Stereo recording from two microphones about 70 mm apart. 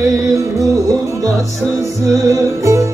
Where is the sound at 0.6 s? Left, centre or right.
Right.